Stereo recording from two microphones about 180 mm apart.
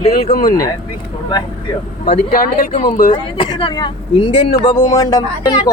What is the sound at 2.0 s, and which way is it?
Speech, 55° left (ahead or behind).